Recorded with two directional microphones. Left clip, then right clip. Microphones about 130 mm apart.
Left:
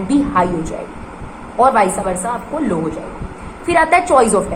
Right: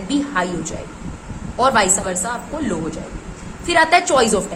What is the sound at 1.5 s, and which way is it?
A woman's voice, 20° right (ahead or behind).